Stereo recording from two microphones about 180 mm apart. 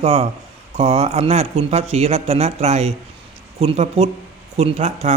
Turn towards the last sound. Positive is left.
turn(degrees=-35)  # may be behind; listen again after turning